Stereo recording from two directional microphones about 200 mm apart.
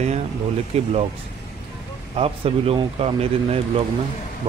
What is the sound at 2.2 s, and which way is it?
Speech, 30° right (ahead or behind).